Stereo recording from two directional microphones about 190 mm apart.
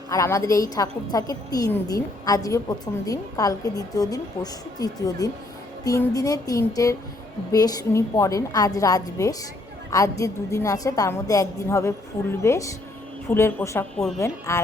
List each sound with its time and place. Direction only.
0.1 s a woman's voice: 15° left (ahead or behind)